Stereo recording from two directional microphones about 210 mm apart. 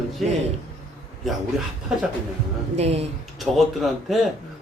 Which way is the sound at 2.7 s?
30° right (ahead or behind).